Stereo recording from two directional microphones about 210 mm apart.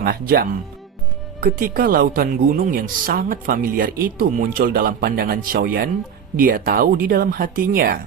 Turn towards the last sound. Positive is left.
turn(degrees=-45)  # may be behind; listen again after turning